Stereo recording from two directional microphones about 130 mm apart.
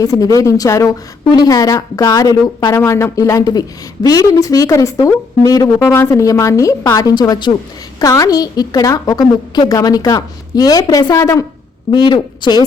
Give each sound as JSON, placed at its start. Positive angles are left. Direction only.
{"t": 0.0, "sound": "a woman's voice", "side_deg": 25}